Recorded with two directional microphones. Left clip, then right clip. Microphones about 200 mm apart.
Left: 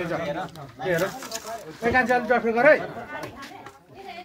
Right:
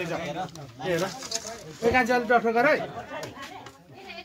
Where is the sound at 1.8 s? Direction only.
60° right (ahead or behind).